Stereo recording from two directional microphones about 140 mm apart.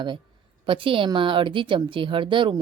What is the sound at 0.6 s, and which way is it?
A woman's voice, 40° right (ahead or behind).